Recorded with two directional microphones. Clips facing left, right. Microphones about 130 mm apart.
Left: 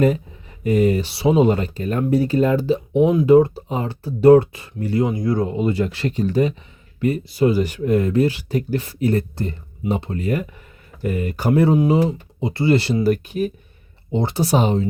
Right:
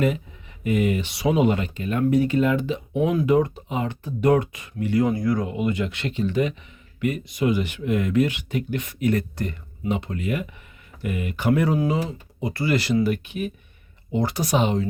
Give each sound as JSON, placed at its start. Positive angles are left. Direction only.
{"t": 0.6, "sound": "speech", "side_deg": 35}
{"t": 5.0, "sound": "speech", "side_deg": 20}
{"t": 14.1, "sound": "speech", "side_deg": 25}